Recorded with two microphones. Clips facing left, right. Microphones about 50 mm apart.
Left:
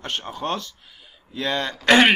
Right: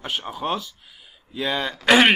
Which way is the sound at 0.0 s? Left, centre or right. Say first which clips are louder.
Right 1 dB; centre.